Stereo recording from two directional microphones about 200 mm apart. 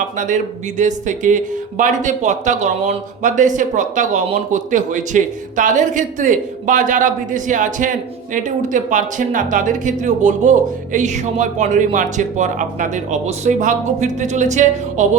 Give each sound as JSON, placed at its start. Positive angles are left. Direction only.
{"t": 0.2, "sound": "a man's voice", "side_deg": -40}